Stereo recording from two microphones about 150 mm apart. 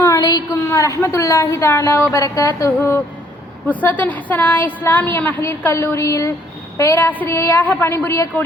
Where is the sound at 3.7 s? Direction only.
10° left (ahead or behind).